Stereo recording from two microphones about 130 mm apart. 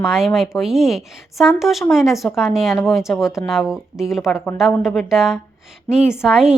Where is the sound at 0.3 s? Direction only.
5° right (ahead or behind).